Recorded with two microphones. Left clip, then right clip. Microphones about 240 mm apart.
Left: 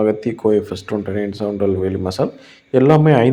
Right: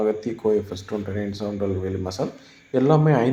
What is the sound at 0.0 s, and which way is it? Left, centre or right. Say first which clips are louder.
Speech: left 6 dB; left.